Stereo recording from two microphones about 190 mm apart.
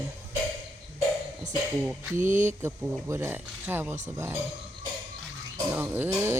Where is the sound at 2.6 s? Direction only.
15° right (ahead or behind).